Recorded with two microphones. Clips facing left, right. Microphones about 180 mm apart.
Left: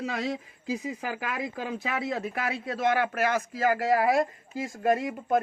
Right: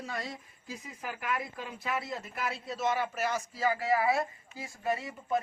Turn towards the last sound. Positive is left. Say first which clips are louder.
# left 8 dB
turn(degrees=55)  # may be behind; listen again after turning